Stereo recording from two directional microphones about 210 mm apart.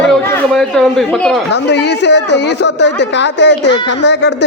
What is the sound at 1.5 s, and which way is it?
Speech, 55° left (ahead or behind).